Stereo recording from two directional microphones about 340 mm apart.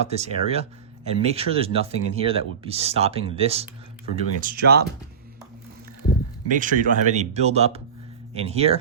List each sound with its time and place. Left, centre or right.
0.0 s speech: centre
6.6 s speech: right